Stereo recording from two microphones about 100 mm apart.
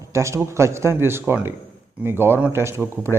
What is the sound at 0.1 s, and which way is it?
Speech, 30° right (ahead or behind).